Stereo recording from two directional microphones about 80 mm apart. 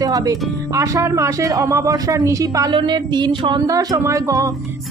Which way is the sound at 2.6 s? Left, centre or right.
Right.